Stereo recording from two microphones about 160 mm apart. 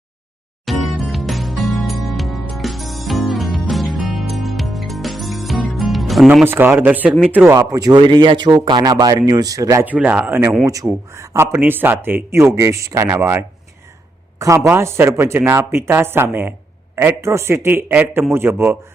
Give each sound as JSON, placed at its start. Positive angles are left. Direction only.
{"t": 0.6, "sound": "music", "side_deg": 0}
{"t": 6.4, "sound": "speech", "side_deg": -15}
{"t": 9.9, "sound": "speech", "side_deg": -10}